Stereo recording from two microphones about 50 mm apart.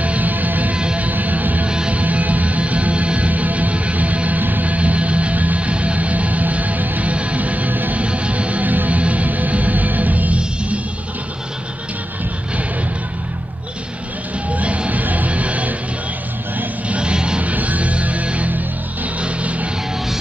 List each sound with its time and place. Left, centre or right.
0.0 s music: right
0.7 s music: centre
1.0 s music: right
1.7 s music: right
8.0 s music: right
14.5 s music: right
16.9 s music: centre
17.5 s music: right